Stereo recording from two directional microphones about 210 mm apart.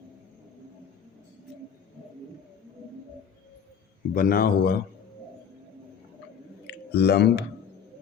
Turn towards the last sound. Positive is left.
turn(degrees=50)  # may be behind; listen again after turning